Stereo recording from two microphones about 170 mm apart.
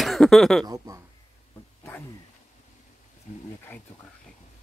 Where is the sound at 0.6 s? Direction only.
20° right (ahead or behind).